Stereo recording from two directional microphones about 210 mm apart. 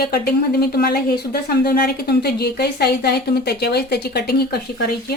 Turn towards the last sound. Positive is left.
turn(degrees=50)  # may be behind; listen again after turning